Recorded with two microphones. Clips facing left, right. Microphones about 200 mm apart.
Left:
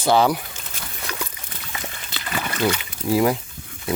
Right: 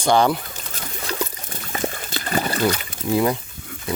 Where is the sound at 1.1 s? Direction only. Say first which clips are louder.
Right 6 dB; 35° right (ahead or behind).